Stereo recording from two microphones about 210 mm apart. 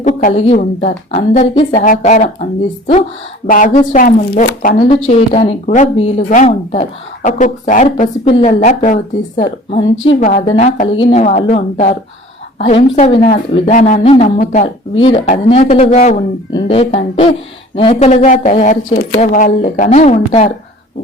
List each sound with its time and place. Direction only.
0.0 s a woman's voice: 35° left (ahead or behind)
10.1 s speech: 35° left (ahead or behind)